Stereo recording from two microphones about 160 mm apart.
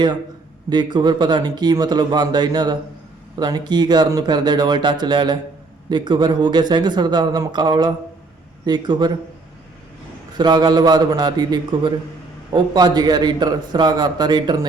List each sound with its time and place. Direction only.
0.7 s a man's voice: 25° right (ahead or behind)
10.3 s a man's voice: 25° right (ahead or behind)